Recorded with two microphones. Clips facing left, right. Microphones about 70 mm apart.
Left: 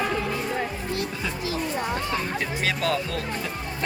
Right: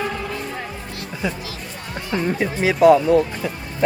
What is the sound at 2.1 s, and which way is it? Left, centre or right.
Speech, centre.